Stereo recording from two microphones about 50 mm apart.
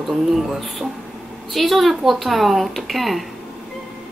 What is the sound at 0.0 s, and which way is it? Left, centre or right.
Speech, centre.